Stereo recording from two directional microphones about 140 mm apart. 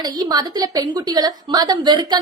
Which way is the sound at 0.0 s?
30° right (ahead or behind).